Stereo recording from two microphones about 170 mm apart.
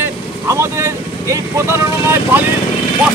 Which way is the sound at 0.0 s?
15° right (ahead or behind).